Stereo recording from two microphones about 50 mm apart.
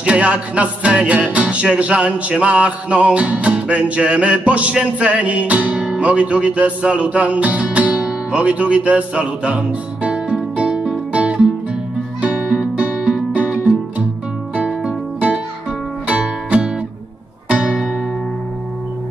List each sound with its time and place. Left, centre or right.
0.0 s music: right